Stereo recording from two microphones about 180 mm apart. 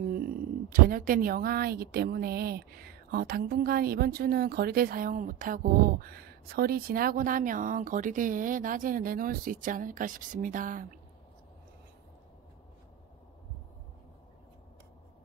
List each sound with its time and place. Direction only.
0.1 s a woman's voice: 50° right (ahead or behind)